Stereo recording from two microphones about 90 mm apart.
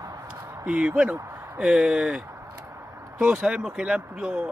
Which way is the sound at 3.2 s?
10° right (ahead or behind).